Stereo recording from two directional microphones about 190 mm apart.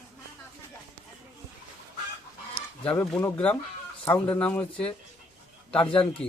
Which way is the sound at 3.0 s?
15° left (ahead or behind).